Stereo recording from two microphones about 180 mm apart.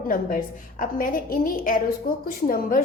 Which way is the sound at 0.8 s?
50° left (ahead or behind).